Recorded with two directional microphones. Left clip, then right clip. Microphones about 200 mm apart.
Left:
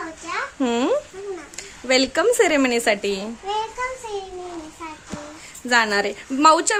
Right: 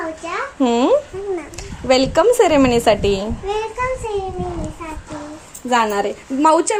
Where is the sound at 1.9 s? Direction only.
15° left (ahead or behind).